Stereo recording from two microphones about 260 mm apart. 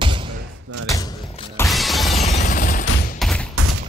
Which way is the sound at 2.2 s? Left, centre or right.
Left.